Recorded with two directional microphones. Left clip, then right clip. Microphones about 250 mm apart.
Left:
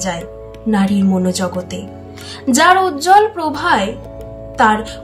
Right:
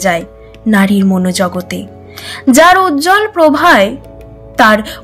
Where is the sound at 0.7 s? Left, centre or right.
Centre.